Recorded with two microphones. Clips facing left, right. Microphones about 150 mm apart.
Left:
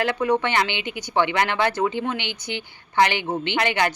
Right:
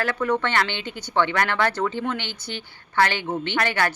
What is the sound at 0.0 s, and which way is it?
A woman's voice, 20° left (ahead or behind).